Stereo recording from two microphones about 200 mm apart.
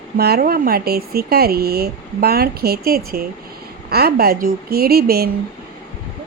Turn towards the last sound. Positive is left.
turn(degrees=-50)  # may be behind; listen again after turning